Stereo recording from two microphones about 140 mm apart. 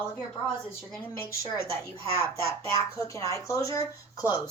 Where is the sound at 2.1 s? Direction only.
20° left (ahead or behind).